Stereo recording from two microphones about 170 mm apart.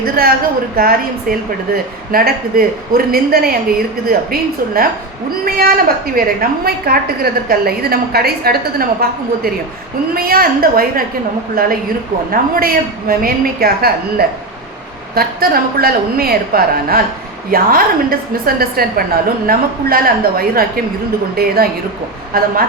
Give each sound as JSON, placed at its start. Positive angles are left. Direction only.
{"t": 0.2, "sound": "a woman's voice", "side_deg": -60}